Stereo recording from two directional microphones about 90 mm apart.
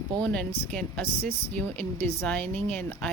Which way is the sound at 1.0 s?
25° left (ahead or behind).